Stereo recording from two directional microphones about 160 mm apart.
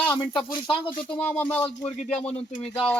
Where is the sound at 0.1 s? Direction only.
30° left (ahead or behind).